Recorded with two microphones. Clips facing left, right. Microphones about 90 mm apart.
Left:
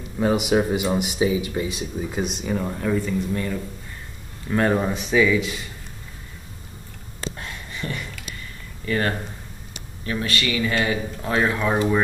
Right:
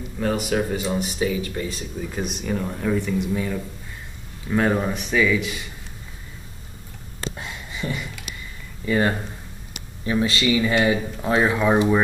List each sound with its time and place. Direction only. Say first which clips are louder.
0.5 s speech: left 3 dB; 15° left (ahead or behind)
7.3 s a sound: right 1 dB; 15° right (ahead or behind)
8.8 s speech: right 3 dB; 15° right (ahead or behind)